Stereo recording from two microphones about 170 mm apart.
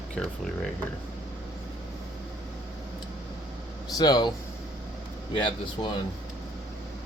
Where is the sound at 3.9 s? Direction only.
25° left (ahead or behind).